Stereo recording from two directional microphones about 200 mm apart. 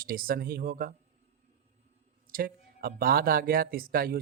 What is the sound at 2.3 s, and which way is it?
Speech, 45° right (ahead or behind).